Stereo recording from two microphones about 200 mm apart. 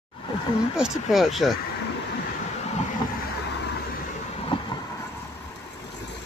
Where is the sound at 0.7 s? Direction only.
Centre (ahead or behind).